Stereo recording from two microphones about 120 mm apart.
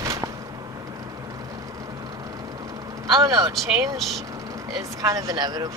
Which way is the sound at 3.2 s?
30° right (ahead or behind).